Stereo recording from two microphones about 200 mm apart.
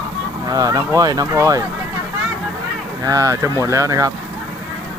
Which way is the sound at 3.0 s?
15° right (ahead or behind).